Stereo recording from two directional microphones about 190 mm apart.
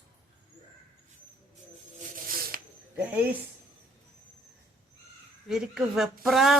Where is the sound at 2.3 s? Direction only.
50° right (ahead or behind).